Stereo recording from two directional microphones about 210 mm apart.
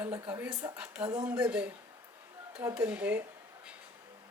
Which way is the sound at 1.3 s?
5° right (ahead or behind).